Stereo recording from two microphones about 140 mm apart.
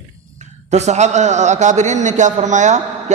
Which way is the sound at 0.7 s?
55° right (ahead or behind).